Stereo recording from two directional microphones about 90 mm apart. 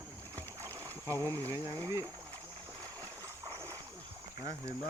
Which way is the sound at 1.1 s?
40° right (ahead or behind).